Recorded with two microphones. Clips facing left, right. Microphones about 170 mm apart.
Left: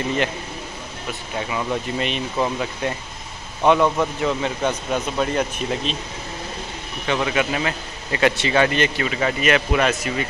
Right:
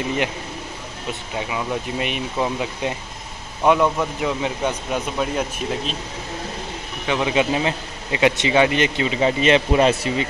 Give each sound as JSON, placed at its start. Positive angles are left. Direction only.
{"t": 1.5, "sound": "speech", "side_deg": -10}
{"t": 7.1, "sound": "speech", "side_deg": -10}
{"t": 7.3, "sound": "speech", "side_deg": -25}